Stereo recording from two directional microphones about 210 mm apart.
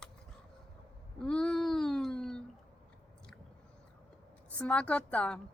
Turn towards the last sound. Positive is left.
turn(degrees=5)  # may be behind; listen again after turning